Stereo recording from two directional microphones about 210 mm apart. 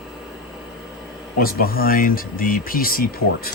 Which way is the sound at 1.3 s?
45° left (ahead or behind).